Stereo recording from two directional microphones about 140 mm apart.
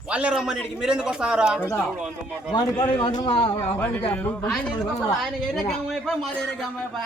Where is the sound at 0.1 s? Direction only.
10° right (ahead or behind).